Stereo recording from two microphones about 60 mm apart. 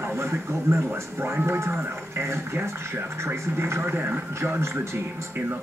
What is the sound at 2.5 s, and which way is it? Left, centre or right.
Speech, right.